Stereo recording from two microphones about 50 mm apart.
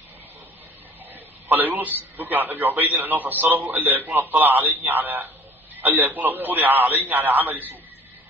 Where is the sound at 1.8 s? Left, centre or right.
Right.